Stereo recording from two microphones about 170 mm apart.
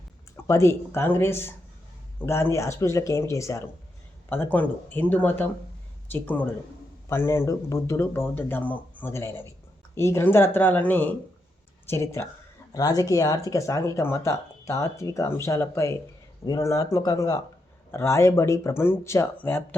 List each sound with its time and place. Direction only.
0.4 s speech: 15° left (ahead or behind)